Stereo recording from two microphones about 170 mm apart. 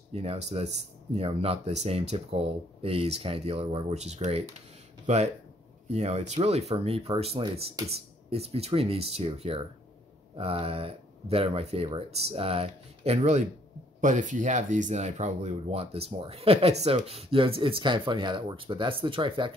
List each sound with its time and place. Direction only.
0.1 s speech: 35° right (ahead or behind)